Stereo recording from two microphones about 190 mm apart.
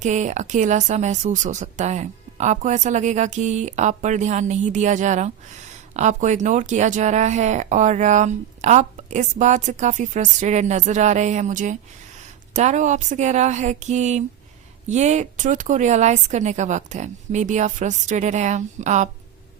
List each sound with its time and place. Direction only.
0.0 s speech: 40° right (ahead or behind)